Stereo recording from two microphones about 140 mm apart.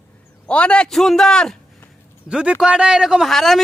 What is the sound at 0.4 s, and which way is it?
A man's voice, 10° left (ahead or behind).